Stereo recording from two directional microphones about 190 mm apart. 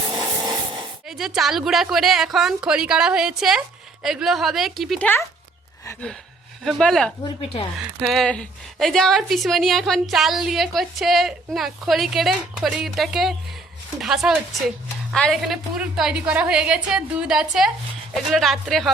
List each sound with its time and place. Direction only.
0.1 s a sound: 25° right (ahead or behind)
1.0 s a woman's voice: centre (ahead or behind)
5.8 s gasp: 15° left (ahead or behind)
6.7 s a woman's voice: centre (ahead or behind)